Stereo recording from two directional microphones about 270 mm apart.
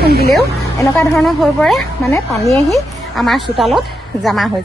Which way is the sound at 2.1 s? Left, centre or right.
Centre.